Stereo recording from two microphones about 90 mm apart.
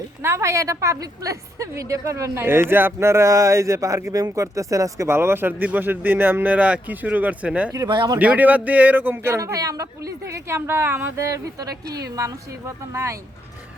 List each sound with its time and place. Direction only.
0.2 s a woman's voice: 30° right (ahead or behind); by 7.7 s 15° right (ahead or behind)
7.9 s speech: 55° right (ahead or behind)
8.2 s speech: 15° right (ahead or behind)
9.4 s speech: 40° right (ahead or behind); by 11.3 s 25° right (ahead or behind)
11.3 s speech: 40° right (ahead or behind)